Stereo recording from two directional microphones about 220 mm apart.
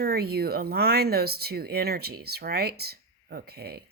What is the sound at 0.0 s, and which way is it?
Speech, 45° right (ahead or behind).